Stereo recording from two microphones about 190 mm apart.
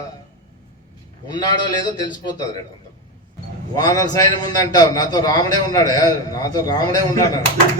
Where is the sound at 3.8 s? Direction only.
20° left (ahead or behind).